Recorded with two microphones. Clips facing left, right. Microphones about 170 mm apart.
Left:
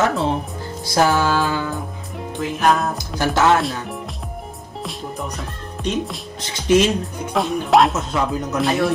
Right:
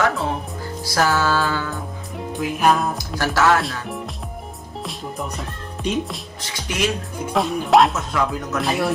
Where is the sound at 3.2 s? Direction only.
20° left (ahead or behind).